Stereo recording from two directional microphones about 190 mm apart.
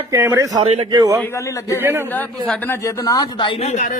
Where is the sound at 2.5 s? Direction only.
15° left (ahead or behind); by 3.9 s 40° left (ahead or behind).